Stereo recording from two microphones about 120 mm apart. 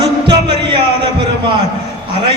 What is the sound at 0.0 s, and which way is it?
Music, 45° right (ahead or behind).